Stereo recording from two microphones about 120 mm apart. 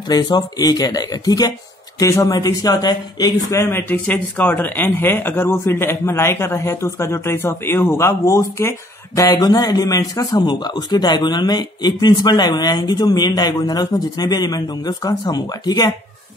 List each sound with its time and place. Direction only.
0.1 s a man's voice: 35° left (ahead or behind)
10.3 s a man's voice: 40° left (ahead or behind)